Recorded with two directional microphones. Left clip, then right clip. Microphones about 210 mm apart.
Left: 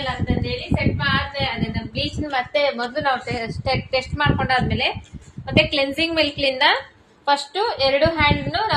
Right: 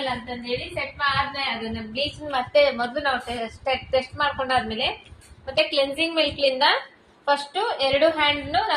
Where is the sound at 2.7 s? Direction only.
40° left (ahead or behind).